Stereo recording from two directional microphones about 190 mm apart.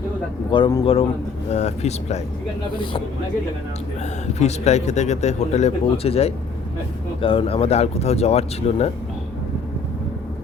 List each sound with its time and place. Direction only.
0.5 s speech: 25° left (ahead or behind)
4.4 s speech: 35° left (ahead or behind)